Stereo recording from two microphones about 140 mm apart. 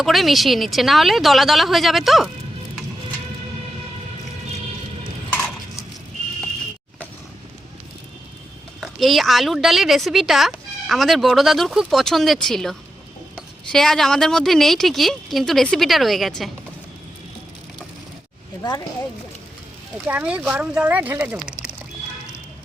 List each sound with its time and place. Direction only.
0.0 s a woman's voice: centre (ahead or behind)
5.3 s a sound: 5° left (ahead or behind)
8.8 s a woman's voice: centre (ahead or behind)
20.1 s speech: 10° right (ahead or behind)